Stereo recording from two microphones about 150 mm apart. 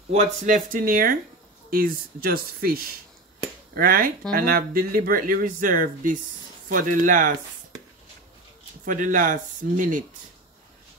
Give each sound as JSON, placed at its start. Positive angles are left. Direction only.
{"t": 0.5, "sound": "speech", "side_deg": -65}
{"t": 3.7, "sound": "speech", "side_deg": -75}
{"t": 8.8, "sound": "speech", "side_deg": -60}